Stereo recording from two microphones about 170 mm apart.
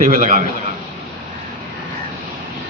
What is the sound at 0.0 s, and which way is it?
Speech, 50° right (ahead or behind).